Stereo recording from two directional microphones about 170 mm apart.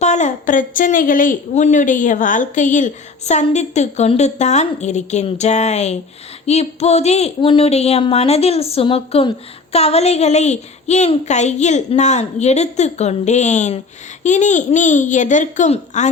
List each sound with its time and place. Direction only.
0.0 s a woman's voice: 45° left (ahead or behind)